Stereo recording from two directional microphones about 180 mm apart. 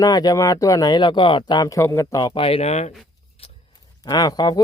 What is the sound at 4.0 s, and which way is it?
Speech, 20° left (ahead or behind).